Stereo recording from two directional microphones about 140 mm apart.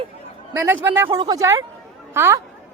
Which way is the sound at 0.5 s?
15° right (ahead or behind).